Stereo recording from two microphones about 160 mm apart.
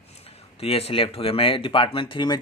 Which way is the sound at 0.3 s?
40° left (ahead or behind).